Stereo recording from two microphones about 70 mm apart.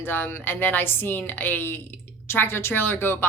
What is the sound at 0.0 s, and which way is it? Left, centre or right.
Speech, left.